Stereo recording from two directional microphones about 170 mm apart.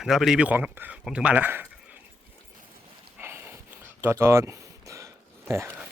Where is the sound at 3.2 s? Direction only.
15° right (ahead or behind).